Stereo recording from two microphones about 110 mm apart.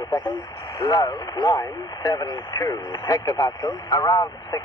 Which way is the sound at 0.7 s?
30° left (ahead or behind).